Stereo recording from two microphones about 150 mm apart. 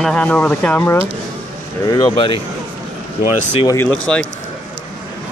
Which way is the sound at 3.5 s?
30° left (ahead or behind).